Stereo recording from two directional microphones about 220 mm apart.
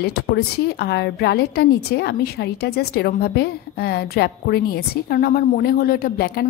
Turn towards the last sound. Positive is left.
turn(degrees=45)  # may be behind; listen again after turning